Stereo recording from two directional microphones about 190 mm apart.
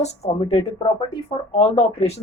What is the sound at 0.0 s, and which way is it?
Speech, 35° left (ahead or behind).